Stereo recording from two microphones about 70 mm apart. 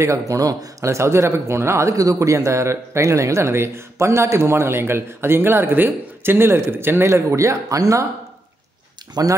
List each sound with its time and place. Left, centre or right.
0.0 s speech: right
9.2 s speech: right